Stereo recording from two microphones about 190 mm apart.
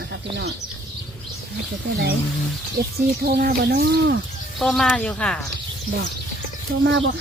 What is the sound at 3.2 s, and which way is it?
Speech, 55° right (ahead or behind).